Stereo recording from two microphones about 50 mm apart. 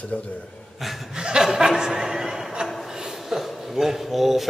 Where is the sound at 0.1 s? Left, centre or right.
Left.